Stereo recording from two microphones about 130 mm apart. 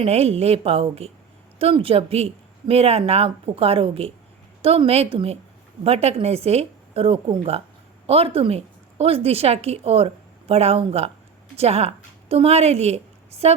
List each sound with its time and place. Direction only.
0.0 s a woman's voice: 50° right (ahead or behind)